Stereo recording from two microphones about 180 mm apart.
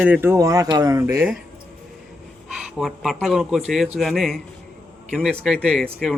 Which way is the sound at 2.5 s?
Centre (ahead or behind).